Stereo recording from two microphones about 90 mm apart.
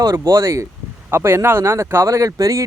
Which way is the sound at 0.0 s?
40° right (ahead or behind).